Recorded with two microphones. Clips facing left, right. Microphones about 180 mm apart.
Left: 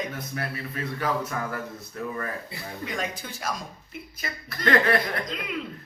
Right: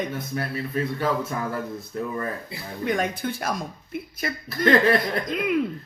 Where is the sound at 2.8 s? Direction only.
55° right (ahead or behind).